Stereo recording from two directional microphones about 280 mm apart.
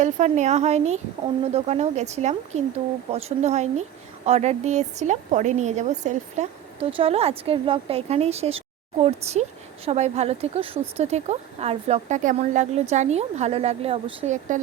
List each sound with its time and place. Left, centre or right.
0.0 s speech: right